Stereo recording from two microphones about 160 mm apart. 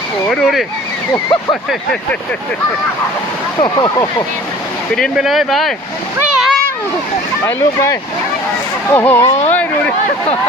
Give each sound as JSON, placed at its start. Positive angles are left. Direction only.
{"t": 0.3, "sound": "speech", "side_deg": 0}
{"t": 1.1, "sound": "speech", "side_deg": 25}
{"t": 3.6, "sound": "speech", "side_deg": 25}
{"t": 4.9, "sound": "speech", "side_deg": 0}
{"t": 6.1, "sound": "splash", "side_deg": -5}
{"t": 7.4, "sound": "speech", "side_deg": 15}
{"t": 9.5, "sound": "a sound", "side_deg": 10}